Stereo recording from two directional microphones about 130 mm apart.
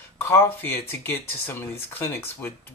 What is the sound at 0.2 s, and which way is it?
Speech, 20° left (ahead or behind).